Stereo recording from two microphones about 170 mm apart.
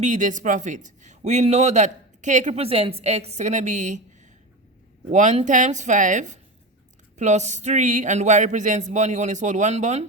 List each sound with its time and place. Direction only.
0.0 s a man's voice: 45° right (ahead or behind)
5.1 s a man's voice: 45° right (ahead or behind)